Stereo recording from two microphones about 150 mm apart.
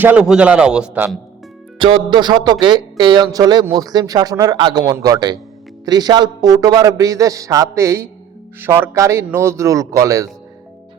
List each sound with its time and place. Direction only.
0.0 s a man's voice: 10° right (ahead or behind)
1.8 s a man's voice: 35° right (ahead or behind)